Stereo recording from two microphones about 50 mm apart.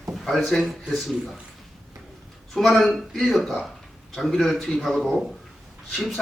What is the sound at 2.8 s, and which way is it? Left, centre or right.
A man's voice, centre.